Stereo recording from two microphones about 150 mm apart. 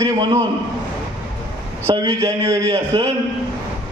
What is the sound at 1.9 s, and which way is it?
A man's voice, 25° right (ahead or behind).